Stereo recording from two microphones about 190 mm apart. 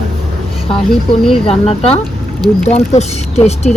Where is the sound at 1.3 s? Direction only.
30° left (ahead or behind).